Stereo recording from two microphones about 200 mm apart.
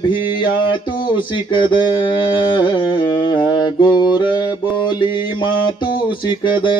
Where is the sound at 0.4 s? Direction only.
25° left (ahead or behind).